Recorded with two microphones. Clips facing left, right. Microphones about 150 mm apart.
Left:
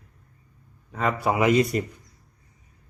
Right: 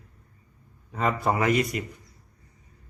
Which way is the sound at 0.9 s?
Centre (ahead or behind).